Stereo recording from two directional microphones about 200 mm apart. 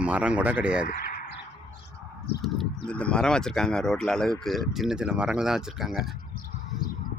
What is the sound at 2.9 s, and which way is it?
Speech, 5° left (ahead or behind).